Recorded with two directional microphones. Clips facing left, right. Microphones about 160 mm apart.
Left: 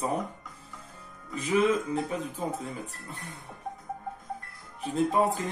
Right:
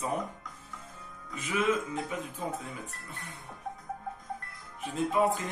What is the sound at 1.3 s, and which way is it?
Speech, 35° left (ahead or behind).